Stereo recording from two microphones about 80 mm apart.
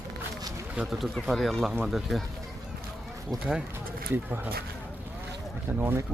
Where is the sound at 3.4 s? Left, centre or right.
Centre.